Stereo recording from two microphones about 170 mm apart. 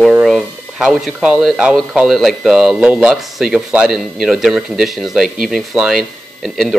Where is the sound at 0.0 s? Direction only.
Centre (ahead or behind).